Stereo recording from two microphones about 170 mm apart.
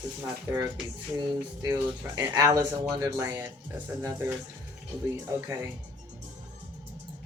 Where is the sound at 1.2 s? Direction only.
20° right (ahead or behind).